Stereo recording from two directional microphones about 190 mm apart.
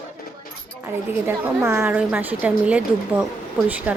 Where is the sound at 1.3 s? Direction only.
15° right (ahead or behind).